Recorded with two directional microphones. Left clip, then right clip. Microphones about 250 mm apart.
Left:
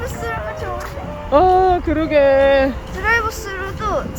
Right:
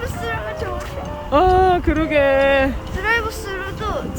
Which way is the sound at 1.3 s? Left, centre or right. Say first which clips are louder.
Left 2 dB; centre.